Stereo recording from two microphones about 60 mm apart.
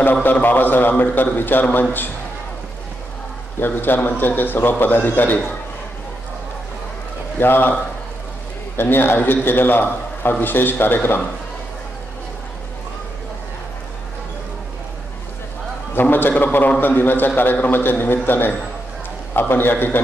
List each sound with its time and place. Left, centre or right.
0.0 s a man's voice: left
3.5 s a man's voice: left
7.3 s a man's voice: left
8.7 s a man's voice: left
15.9 s a man's voice: left